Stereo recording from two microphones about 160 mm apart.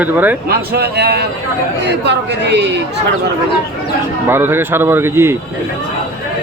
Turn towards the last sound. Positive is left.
turn(degrees=-15)  # may be behind; listen again after turning